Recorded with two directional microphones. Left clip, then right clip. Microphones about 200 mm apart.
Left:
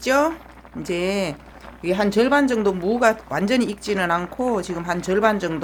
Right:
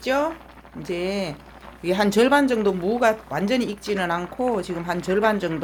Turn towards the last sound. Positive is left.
turn(degrees=10)  # may be behind; listen again after turning